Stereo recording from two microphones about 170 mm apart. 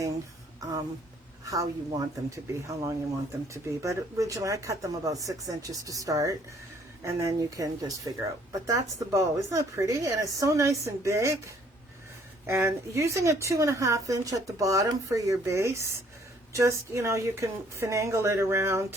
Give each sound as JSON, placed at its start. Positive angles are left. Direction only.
{"t": 1.5, "sound": "a woman's voice", "side_deg": -20}